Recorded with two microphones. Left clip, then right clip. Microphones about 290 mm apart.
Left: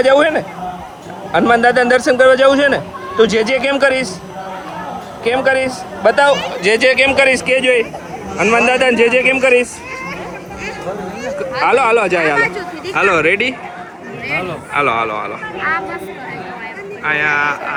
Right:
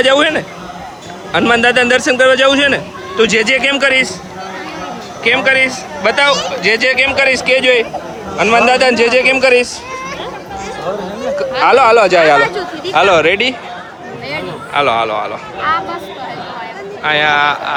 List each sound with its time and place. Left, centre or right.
0.0 s a man's voice: centre
5.2 s a man's voice: centre
7.3 s speech: right
8.7 s a man's voice: centre
9.0 s speech: right
9.3 s a man's voice: centre
11.6 s a man's voice: centre
12.4 s speech: right
12.9 s a man's voice: centre
14.7 s a man's voice: centre
17.0 s a man's voice: centre